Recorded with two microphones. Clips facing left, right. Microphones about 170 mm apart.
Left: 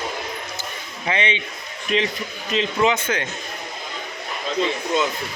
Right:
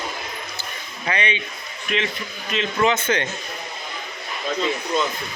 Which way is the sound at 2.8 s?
15° left (ahead or behind).